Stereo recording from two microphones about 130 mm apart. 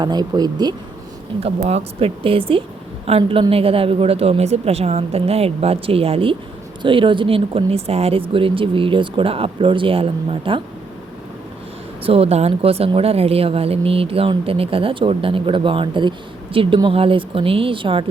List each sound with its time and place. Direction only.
0.0 s speech: 35° right (ahead or behind)
1.4 s speech: 50° right (ahead or behind)
12.0 s speech: 50° right (ahead or behind)